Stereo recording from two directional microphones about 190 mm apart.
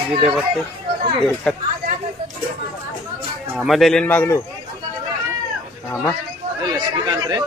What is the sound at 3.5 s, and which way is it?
Speech, centre (ahead or behind).